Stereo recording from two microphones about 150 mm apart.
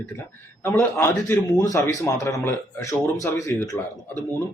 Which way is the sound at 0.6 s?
15° left (ahead or behind).